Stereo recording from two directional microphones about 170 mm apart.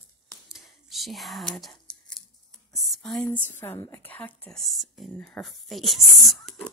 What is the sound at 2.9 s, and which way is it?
A woman's voice, 5° left (ahead or behind).